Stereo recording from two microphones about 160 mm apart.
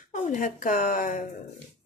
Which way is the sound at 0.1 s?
50° left (ahead or behind).